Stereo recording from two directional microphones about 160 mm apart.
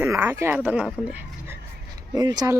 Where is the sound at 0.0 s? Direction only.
15° right (ahead or behind).